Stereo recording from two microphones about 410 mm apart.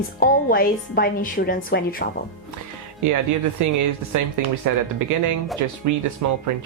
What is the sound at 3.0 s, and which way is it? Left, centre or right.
Speech, right.